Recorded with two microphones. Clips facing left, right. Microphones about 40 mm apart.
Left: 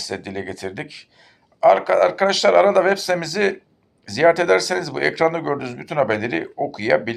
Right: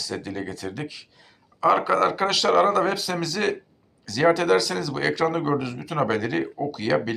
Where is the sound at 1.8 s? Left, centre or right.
Centre.